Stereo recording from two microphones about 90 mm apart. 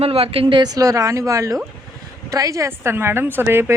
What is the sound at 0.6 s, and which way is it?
A woman's voice, 45° right (ahead or behind).